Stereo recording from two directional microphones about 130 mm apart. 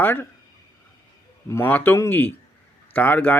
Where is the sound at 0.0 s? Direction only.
15° left (ahead or behind).